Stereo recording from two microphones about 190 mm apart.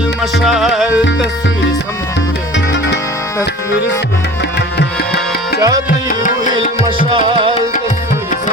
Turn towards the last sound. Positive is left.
turn(degrees=-25)  # may be behind; listen again after turning